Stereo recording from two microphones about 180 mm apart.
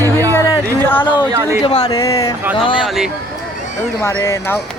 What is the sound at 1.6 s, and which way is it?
Speech, 35° left (ahead or behind).